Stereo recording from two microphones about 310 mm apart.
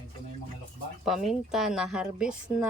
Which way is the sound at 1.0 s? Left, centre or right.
Centre.